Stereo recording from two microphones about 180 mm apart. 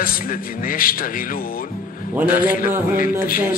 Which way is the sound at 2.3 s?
50° left (ahead or behind).